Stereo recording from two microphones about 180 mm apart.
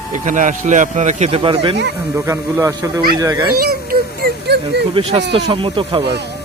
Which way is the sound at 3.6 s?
60° right (ahead or behind).